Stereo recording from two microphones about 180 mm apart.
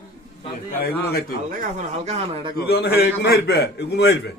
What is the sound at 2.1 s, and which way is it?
Speech, 30° right (ahead or behind).